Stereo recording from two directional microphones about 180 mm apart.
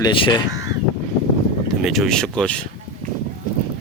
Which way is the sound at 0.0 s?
20° left (ahead or behind).